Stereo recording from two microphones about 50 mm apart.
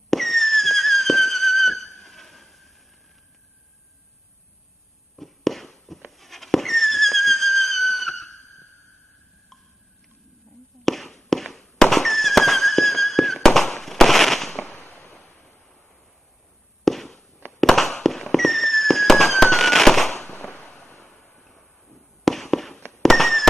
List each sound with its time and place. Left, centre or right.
0.1 s a sound: centre
5.1 s walk: centre
10.9 s fireworks: centre
14.8 s fireworks: left
15.2 s a sound: left
16.8 s walk: centre
17.6 s fireworks: centre
20.2 s fireworks: left
21.1 s waves: left
21.4 s fireworks: centre